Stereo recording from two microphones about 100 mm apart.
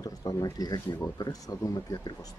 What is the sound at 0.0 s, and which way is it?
Speech, 40° left (ahead or behind).